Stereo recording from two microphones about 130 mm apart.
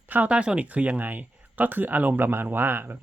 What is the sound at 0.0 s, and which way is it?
Speech, 15° right (ahead or behind).